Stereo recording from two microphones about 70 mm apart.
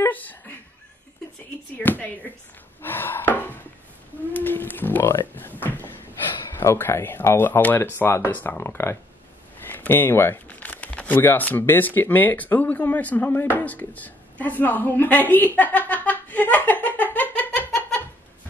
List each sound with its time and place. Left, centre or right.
0.1 s speech: left
1.8 s speech: left
6.6 s speech: left
10.5 s speech: left